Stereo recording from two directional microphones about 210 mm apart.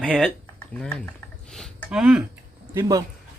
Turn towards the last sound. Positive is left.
turn(degrees=-15)  # may be behind; listen again after turning